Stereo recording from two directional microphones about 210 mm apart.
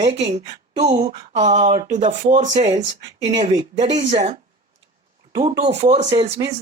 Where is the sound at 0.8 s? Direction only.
30° right (ahead or behind).